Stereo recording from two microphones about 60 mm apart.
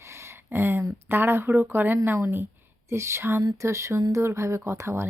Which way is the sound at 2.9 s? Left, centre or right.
Right.